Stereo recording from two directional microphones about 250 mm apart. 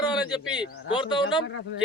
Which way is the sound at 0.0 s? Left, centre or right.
Centre.